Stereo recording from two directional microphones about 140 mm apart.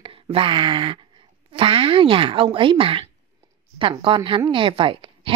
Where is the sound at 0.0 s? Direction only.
40° right (ahead or behind).